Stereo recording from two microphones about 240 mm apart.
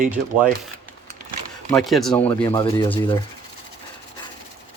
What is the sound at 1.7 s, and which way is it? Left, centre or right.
Speech, centre.